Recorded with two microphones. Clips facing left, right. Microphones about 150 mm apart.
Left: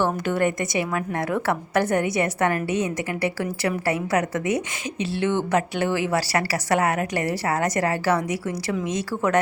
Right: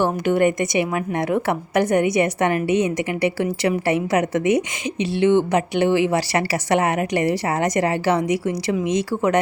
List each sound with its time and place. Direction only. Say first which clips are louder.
0.0 s a woman's voice: right 4 dB; 15° right (ahead or behind)